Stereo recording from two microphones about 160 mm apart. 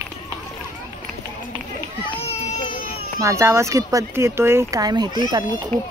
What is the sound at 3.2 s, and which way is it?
Speech, 20° right (ahead or behind).